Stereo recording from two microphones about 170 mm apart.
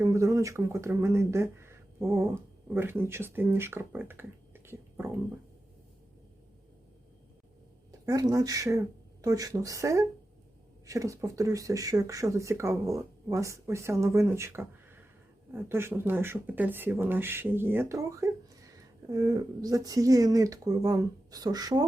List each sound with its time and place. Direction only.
0.0 s speech: 15° right (ahead or behind)
8.0 s speech: 20° right (ahead or behind)